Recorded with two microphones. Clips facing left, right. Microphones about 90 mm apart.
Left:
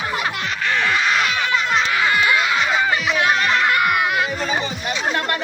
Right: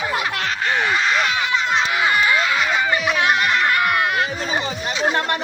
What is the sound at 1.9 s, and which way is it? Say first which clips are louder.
Baby cry: even; 5° right (ahead or behind).